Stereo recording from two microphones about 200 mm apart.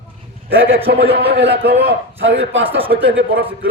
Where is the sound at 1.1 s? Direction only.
55° right (ahead or behind).